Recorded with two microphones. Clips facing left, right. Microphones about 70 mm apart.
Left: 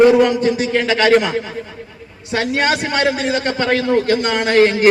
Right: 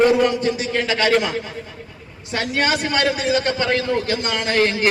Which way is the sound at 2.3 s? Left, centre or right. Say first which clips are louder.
Left 3 dB; left.